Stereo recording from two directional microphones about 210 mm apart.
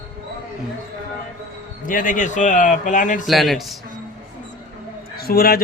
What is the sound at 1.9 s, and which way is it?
A man's voice, 40° left (ahead or behind).